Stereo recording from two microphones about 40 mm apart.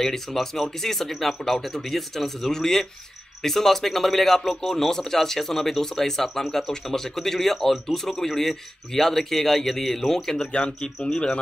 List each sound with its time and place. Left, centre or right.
0.0 s speech: centre
10.5 s speech: left